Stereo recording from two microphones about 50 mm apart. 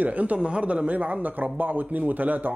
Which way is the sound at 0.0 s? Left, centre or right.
Right.